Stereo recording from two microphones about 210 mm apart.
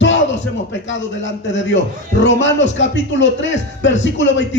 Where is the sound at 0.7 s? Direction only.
60° left (ahead or behind).